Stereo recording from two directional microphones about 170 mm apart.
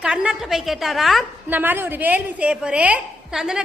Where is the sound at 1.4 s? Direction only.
10° right (ahead or behind).